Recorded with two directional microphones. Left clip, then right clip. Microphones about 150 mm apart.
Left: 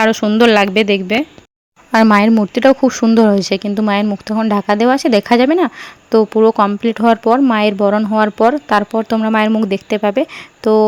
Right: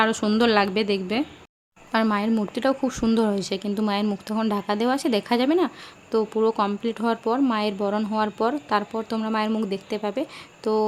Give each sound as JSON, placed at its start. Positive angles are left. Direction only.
{"t": 0.0, "sound": "speech", "side_deg": 35}
{"t": 1.9, "sound": "speech", "side_deg": 60}
{"t": 2.4, "sound": "speech", "side_deg": 45}